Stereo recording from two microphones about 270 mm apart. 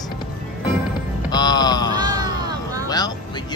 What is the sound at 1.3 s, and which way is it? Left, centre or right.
Music, centre.